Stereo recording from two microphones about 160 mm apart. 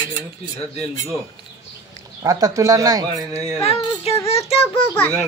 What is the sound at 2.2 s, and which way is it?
Speech, 25° right (ahead or behind).